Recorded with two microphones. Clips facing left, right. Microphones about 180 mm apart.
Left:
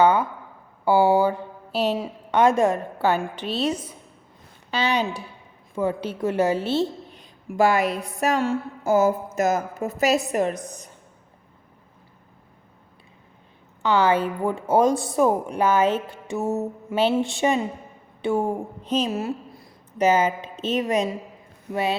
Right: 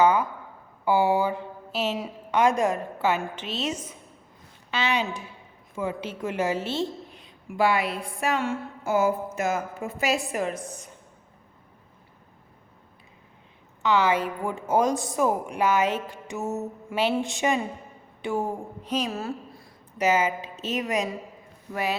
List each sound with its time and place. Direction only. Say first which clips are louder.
0.0 s a woman's voice: left 2 dB; 30° left (ahead or behind)
7.5 s a woman's voice: left 4 dB; 45° left (ahead or behind)
13.8 s a woman's voice: left 3 dB; 30° left (ahead or behind)
18.3 s a sound: left 4 dB; 30° left (ahead or behind)
20.0 s a woman's voice: left 4 dB; 30° left (ahead or behind)
20.7 s a sound: left 5 dB; 30° left (ahead or behind)